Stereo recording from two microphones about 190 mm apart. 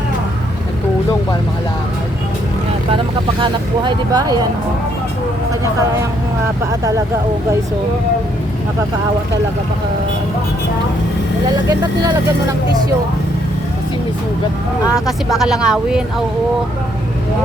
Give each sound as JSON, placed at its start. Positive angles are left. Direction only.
{"t": 3.4, "sound": "speech", "side_deg": -25}
{"t": 6.7, "sound": "speech", "side_deg": -15}
{"t": 11.7, "sound": "speech", "side_deg": -20}
{"t": 14.9, "sound": "speech", "side_deg": 0}